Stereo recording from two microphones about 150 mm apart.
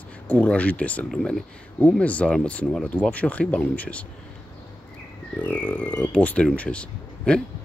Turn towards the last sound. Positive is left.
turn(degrees=5)  # may be behind; listen again after turning